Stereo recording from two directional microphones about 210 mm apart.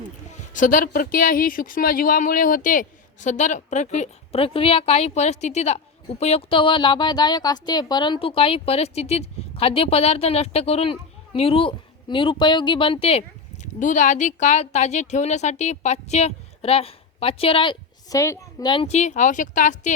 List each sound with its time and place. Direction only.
0.5 s a woman's voice: 40° left (ahead or behind)